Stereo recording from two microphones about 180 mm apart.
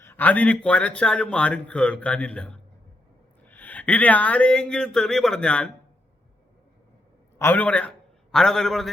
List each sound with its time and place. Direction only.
0.0 s a man's voice: 10° left (ahead or behind)
7.3 s a man's voice: 10° left (ahead or behind)